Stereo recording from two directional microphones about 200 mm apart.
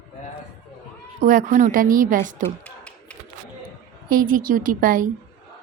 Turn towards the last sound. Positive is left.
turn(degrees=-45)  # may be behind; listen again after turning